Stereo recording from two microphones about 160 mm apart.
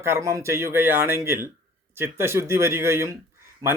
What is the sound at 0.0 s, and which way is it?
Speech, 15° right (ahead or behind).